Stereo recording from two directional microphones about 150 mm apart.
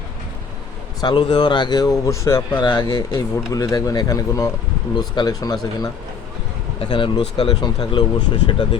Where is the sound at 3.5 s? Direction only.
20° left (ahead or behind).